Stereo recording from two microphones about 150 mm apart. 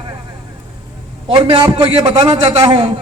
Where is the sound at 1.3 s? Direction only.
30° right (ahead or behind).